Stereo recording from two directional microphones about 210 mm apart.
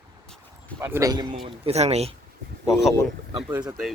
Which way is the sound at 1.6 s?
30° right (ahead or behind).